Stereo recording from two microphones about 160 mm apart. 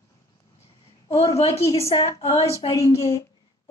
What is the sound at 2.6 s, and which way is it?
Speech, 20° left (ahead or behind).